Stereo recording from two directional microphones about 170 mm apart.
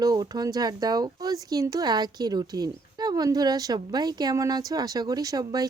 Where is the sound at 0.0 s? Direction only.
20° right (ahead or behind).